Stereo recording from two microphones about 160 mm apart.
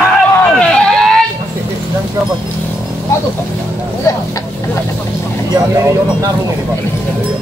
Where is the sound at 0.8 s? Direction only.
5° left (ahead or behind).